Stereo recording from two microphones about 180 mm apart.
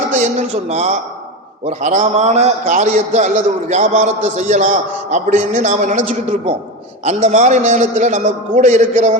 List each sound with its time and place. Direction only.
0.1 s a man's voice: 40° right (ahead or behind)
7.0 s a man's voice: 40° right (ahead or behind)